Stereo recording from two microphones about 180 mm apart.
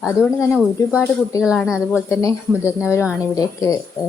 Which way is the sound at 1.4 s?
5° right (ahead or behind).